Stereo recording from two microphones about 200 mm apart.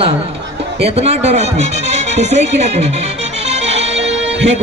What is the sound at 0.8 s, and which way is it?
Speech, 30° right (ahead or behind).